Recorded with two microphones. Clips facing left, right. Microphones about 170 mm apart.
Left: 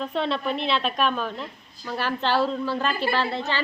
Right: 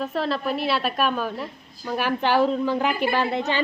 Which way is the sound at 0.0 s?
Centre (ahead or behind).